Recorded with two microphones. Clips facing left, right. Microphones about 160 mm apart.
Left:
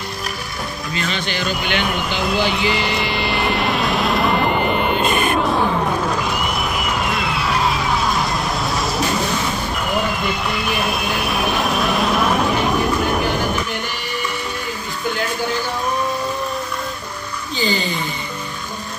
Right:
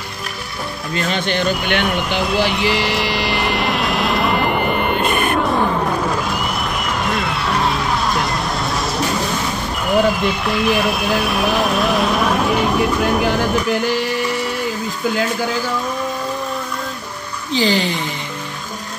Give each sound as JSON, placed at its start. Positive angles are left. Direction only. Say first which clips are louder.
{"t": 0.9, "sound": "speech", "louder": "right 5 dB", "side_deg": -55}
{"t": 2.2, "sound": "vehicle", "louder": "even", "side_deg": 0}
{"t": 17.5, "sound": "speech", "louder": "right 5 dB", "side_deg": -90}